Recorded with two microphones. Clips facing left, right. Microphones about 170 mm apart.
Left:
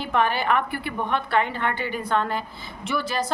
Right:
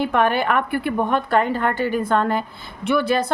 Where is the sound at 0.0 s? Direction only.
55° right (ahead or behind).